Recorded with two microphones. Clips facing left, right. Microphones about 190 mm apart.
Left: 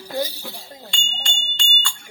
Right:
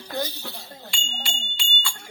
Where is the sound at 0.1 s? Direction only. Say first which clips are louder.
Left 4 dB; 10° left (ahead or behind).